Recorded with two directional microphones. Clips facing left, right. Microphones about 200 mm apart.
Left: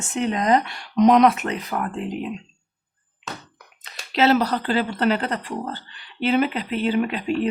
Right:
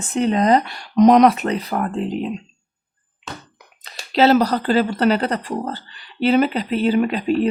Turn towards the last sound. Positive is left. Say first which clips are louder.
# right 4 dB
turn(degrees=-40)  # may be behind; listen again after turning